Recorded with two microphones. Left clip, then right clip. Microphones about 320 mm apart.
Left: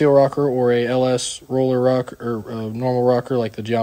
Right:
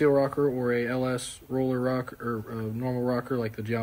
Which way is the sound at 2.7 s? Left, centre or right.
Centre.